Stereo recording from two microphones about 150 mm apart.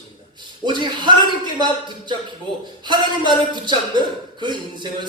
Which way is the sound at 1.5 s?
30° right (ahead or behind).